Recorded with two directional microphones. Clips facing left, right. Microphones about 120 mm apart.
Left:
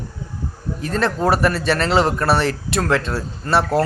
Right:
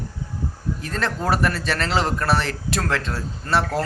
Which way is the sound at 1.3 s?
65° left (ahead or behind).